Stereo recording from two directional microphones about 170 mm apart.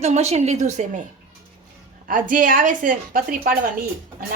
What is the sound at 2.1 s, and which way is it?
A woman's voice, 50° right (ahead or behind).